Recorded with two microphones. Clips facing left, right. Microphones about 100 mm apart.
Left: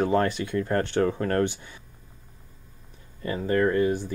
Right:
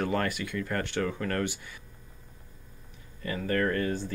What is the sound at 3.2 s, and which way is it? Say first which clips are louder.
Speech: left 5 dB; 25° left (ahead or behind).